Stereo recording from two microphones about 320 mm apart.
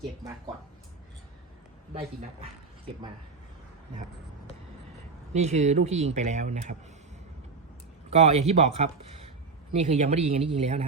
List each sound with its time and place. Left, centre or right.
1.9 s speech: centre
5.3 s speech: right
8.1 s speech: centre